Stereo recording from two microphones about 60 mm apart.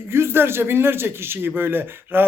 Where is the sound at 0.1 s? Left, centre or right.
Right.